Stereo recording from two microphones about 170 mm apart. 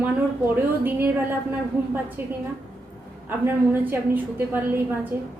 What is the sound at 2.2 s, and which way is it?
A woman's voice, 15° right (ahead or behind).